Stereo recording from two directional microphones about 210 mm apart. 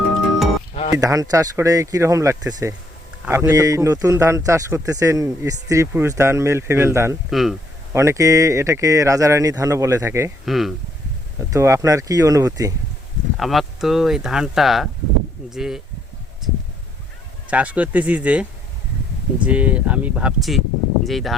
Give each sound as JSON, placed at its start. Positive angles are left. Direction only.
{"t": 0.7, "sound": "music", "side_deg": 35}
{"t": 0.9, "sound": "a man's voice", "side_deg": -15}
{"t": 7.3, "sound": "speech", "side_deg": 0}
{"t": 7.9, "sound": "a man's voice", "side_deg": -15}
{"t": 10.4, "sound": "speech", "side_deg": 0}
{"t": 11.5, "sound": "a man's voice", "side_deg": -15}
{"t": 13.3, "sound": "speech", "side_deg": 0}
{"t": 17.5, "sound": "a man's voice", "side_deg": -5}
{"t": 19.5, "sound": "a man's voice", "side_deg": -5}